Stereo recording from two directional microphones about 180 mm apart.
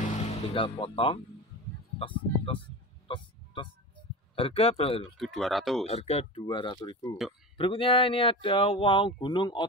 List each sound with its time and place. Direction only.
0.0 s music: 40° left (ahead or behind)
2.0 s speech: 30° left (ahead or behind)
3.1 s a sound: 30° left (ahead or behind)
4.4 s speech: 30° left (ahead or behind)
5.1 s speech: centre (ahead or behind)
5.9 s speech: 35° left (ahead or behind)